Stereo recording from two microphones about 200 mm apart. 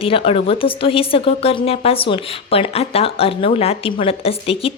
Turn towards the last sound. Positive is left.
turn(degrees=30)  # may be behind; listen again after turning